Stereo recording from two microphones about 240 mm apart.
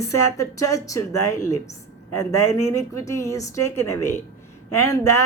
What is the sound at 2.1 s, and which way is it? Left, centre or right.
Speech, left.